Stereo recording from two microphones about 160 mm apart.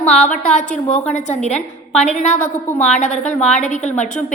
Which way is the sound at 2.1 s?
45° left (ahead or behind).